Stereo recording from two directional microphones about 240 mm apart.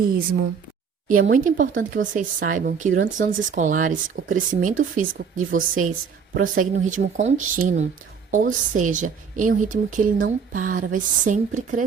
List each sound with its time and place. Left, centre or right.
1.2 s speech: right